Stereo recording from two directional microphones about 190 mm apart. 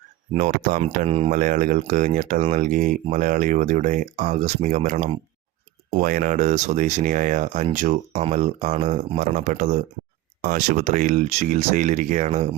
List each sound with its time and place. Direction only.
0.3 s speech: 40° right (ahead or behind)